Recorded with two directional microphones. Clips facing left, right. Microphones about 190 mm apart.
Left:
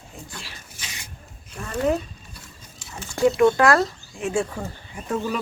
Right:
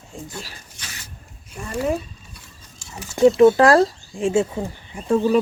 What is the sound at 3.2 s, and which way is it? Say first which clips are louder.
Speech: right 5 dB; 15° right (ahead or behind).